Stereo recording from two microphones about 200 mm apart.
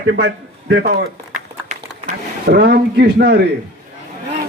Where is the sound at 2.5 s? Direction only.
50° right (ahead or behind).